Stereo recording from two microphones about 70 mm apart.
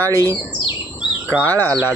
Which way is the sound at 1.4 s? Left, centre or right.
Left.